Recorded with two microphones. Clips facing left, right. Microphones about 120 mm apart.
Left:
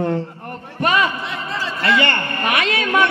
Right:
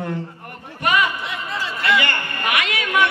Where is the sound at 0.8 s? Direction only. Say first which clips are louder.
Left 2 dB; 35° left (ahead or behind).